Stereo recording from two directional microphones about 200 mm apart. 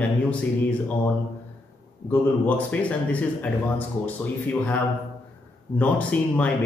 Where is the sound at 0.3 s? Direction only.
5° left (ahead or behind).